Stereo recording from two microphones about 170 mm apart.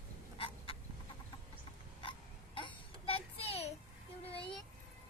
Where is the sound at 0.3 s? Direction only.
35° left (ahead or behind).